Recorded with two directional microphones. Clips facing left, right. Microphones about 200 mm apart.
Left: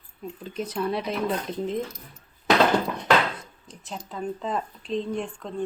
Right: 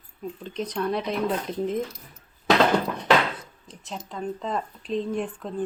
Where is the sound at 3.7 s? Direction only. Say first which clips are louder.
Right 1 dB; centre (ahead or behind).